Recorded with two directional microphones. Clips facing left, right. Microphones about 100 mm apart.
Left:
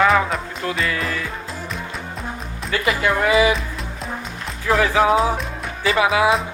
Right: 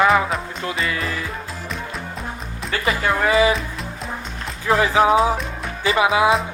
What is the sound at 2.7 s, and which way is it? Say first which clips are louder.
Speech: left 1 dB; 30° right (ahead or behind).